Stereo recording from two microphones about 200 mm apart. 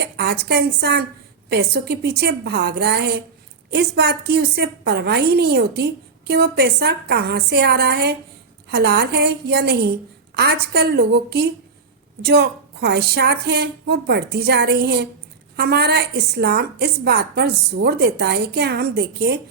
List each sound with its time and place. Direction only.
0.0 s a woman's voice: 55° right (ahead or behind)